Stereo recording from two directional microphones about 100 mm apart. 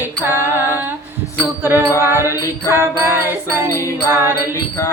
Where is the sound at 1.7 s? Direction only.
30° left (ahead or behind).